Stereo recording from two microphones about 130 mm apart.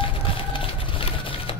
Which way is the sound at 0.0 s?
40° left (ahead or behind).